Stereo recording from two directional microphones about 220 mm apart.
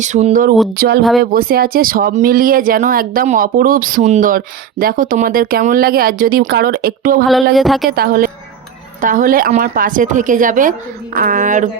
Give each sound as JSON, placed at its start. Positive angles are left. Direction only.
{"t": 0.0, "sound": "speech", "side_deg": -30}
{"t": 0.8, "sound": "speech", "side_deg": -45}
{"t": 7.5, "sound": "a woman's voice", "side_deg": 0}
{"t": 7.9, "sound": "speech", "side_deg": -45}